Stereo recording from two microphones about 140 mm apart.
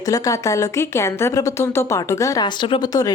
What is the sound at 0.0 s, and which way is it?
Speech, 25° left (ahead or behind).